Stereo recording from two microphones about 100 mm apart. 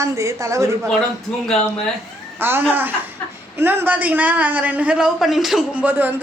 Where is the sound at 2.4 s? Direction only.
20° right (ahead or behind); by 5.6 s 5° right (ahead or behind).